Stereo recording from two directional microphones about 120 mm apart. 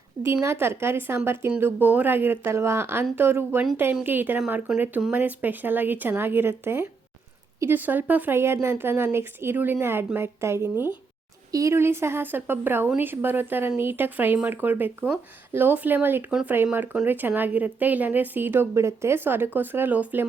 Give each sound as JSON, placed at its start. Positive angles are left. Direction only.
{"t": 0.4, "sound": "a woman's voice", "side_deg": -20}